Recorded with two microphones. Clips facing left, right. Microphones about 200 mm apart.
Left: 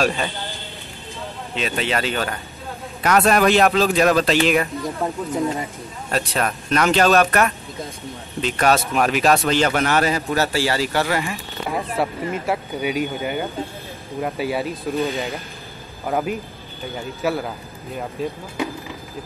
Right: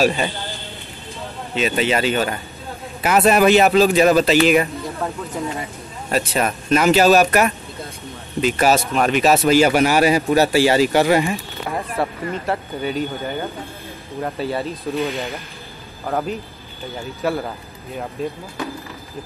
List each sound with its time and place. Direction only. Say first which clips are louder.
0.0 s speech: right 3 dB; 5° right (ahead or behind)
1.5 s speech: right 4 dB; 5° right (ahead or behind)
5.0 s speech: left 1 dB; 20° left (ahead or behind)
6.0 s speech: right 3 dB; 5° right (ahead or behind); by 11.3 s 20° right (ahead or behind)
11.7 s speech: even; centre (ahead or behind)